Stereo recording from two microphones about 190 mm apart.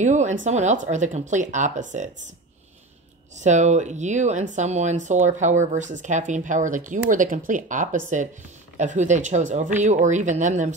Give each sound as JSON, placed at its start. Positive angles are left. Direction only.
{"t": 0.0, "sound": "speech", "side_deg": -40}
{"t": 3.3, "sound": "speech", "side_deg": -40}